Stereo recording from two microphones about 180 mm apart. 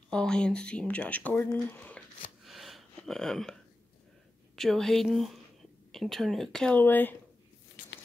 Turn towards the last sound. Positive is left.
turn(degrees=10)  # may be behind; listen again after turning